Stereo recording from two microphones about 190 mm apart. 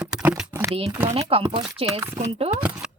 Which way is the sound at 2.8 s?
5° right (ahead or behind).